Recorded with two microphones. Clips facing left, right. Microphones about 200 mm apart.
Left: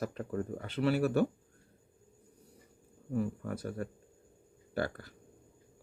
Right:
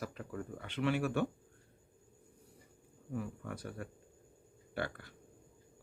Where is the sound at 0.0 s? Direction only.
40° left (ahead or behind).